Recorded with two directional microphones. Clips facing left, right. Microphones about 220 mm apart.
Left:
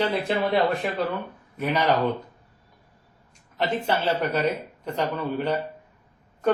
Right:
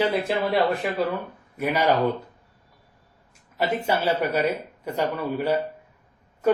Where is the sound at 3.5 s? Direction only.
10° right (ahead or behind).